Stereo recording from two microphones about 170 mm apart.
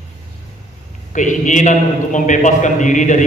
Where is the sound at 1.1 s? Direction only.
45° left (ahead or behind).